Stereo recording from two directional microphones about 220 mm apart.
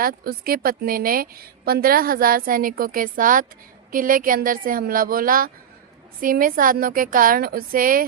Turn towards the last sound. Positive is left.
turn(degrees=-40)  # may be behind; listen again after turning